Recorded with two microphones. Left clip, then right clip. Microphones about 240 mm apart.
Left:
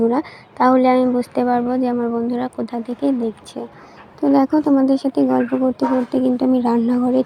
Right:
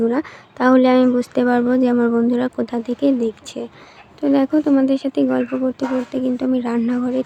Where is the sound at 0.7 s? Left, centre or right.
Right.